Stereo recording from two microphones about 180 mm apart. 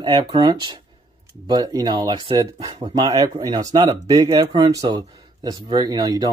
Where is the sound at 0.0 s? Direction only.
25° right (ahead or behind).